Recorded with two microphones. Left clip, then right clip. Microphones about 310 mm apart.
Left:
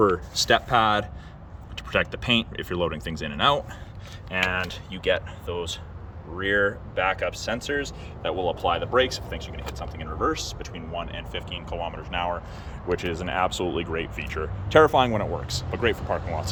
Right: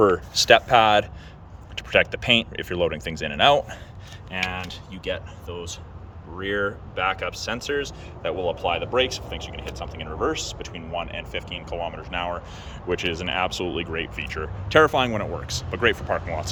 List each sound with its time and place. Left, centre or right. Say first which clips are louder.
0.0 s speech: right 3 dB; centre